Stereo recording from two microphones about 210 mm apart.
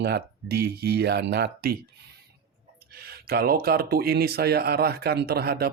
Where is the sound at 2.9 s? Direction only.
45° right (ahead or behind).